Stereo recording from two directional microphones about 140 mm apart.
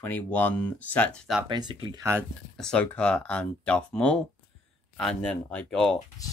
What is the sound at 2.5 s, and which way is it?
Speech, 5° left (ahead or behind).